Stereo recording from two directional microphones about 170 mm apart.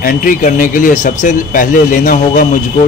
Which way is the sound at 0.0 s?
55° left (ahead or behind).